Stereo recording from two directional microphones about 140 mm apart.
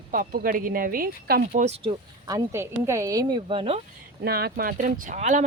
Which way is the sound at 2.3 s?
20° right (ahead or behind).